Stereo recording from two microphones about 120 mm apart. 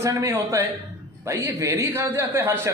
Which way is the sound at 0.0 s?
25° right (ahead or behind).